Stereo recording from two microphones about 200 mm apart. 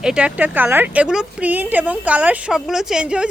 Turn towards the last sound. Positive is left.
turn(degrees=-5)  # may be behind; listen again after turning